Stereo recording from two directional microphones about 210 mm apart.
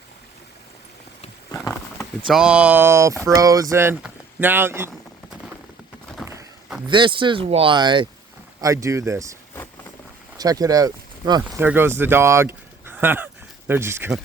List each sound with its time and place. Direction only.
1.5 s a sound: 15° left (ahead or behind)
2.2 s speech: 5° right (ahead or behind)
6.8 s speech: 25° right (ahead or behind)
10.3 s speech: 15° right (ahead or behind)